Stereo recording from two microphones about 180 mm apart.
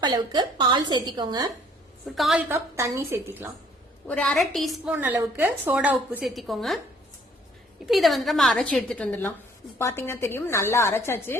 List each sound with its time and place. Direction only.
0.0 s a woman's voice: 25° right (ahead or behind)
2.0 s a woman's voice: centre (ahead or behind)
2.5 s a woman's voice: 15° right (ahead or behind)
4.0 s a woman's voice: 5° left (ahead or behind)
7.9 s a woman's voice: centre (ahead or behind)